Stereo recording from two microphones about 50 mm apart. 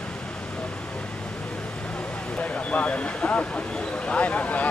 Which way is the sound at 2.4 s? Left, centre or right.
Left.